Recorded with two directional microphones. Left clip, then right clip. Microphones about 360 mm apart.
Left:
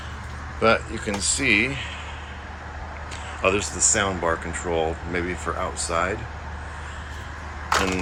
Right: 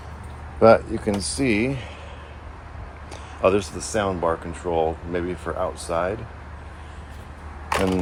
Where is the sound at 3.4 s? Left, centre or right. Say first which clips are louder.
Right 2 dB; centre.